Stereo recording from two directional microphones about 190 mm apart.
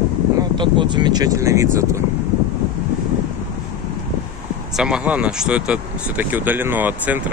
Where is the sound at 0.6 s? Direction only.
25° right (ahead or behind).